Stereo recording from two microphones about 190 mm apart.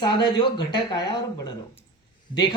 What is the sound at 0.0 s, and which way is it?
Speech, 25° left (ahead or behind).